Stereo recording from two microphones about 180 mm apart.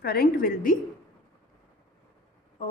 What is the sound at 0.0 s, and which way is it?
Speech, 55° left (ahead or behind).